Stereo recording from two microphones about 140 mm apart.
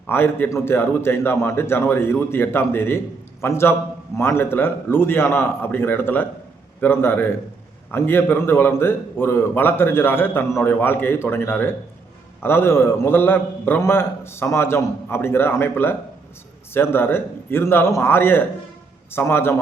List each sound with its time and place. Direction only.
0.1 s a man's voice: 15° left (ahead or behind)